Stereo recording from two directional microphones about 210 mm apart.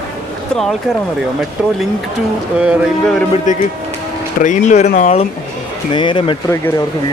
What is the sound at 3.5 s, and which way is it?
Speech, 35° left (ahead or behind).